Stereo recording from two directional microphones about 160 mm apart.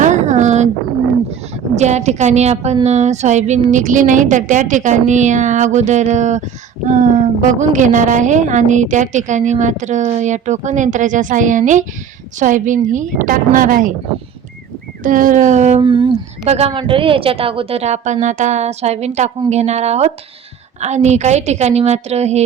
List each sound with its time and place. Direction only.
0.0 s a sound: 50° right (ahead or behind)
1.7 s a woman's voice: 45° right (ahead or behind)
15.0 s a woman's voice: 55° right (ahead or behind)
15.8 s speech: 30° right (ahead or behind)
16.5 s a woman's voice: 40° right (ahead or behind)